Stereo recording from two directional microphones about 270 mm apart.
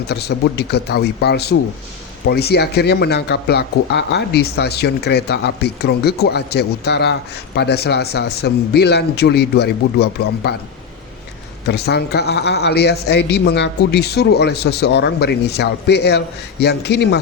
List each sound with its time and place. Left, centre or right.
0.1 s speech: left
11.7 s speech: left